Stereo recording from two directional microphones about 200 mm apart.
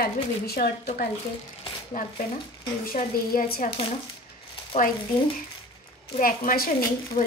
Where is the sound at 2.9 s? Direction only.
45° left (ahead or behind).